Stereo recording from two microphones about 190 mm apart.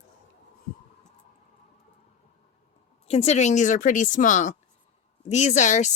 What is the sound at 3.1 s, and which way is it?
Speech, 35° left (ahead or behind).